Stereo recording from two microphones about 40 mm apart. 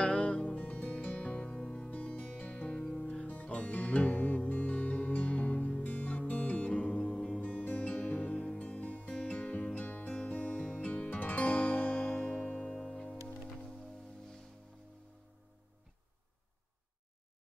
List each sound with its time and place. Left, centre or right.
0.0 s music: left
0.6 s music: left
1.9 s music: left
12.8 s music: centre